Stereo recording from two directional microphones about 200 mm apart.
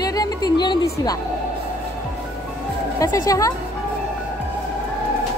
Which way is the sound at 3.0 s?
15° left (ahead or behind).